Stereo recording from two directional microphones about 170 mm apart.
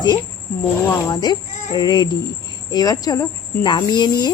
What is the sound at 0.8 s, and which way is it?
Speech, 25° left (ahead or behind).